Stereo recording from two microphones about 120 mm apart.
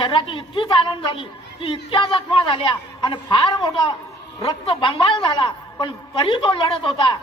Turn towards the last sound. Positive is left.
turn(degrees=45)  # may be behind; listen again after turning